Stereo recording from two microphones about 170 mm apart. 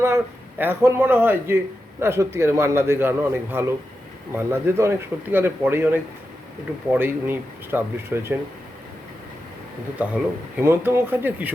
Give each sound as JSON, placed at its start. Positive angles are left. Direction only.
{"t": 0.6, "sound": "a man's voice", "side_deg": -15}
{"t": 10.0, "sound": "a man's voice", "side_deg": -10}